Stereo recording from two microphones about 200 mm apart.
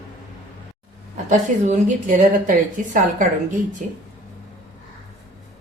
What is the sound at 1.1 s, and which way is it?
A woman's voice, 35° right (ahead or behind).